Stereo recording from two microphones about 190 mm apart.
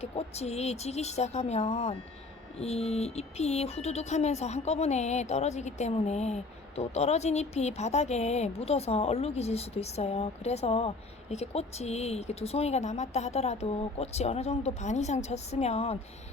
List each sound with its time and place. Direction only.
0.0 s speech: 35° left (ahead or behind)